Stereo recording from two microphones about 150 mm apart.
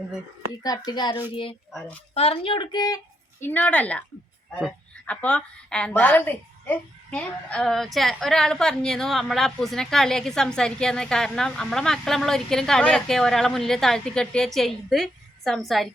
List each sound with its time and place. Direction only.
0.9 s a child's voice: 30° left (ahead or behind)
1.3 s speech: 35° left (ahead or behind)
3.4 s speech: 10° left (ahead or behind)
5.0 s a woman's voice: 10° left (ahead or behind)